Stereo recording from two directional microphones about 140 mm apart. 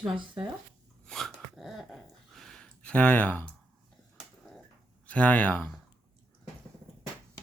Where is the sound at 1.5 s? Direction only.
Centre (ahead or behind).